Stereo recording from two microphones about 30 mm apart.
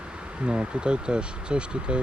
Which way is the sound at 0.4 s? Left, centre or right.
Right.